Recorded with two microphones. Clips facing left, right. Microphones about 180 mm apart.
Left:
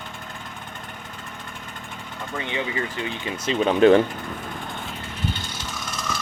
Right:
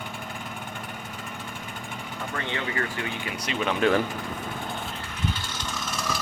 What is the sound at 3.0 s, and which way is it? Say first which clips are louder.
Speech: left 4 dB; 25° left (ahead or behind).